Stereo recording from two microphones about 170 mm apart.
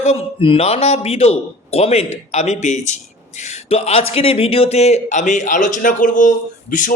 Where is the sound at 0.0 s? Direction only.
35° left (ahead or behind).